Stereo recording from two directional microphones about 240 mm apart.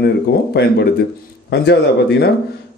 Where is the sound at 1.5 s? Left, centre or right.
Left.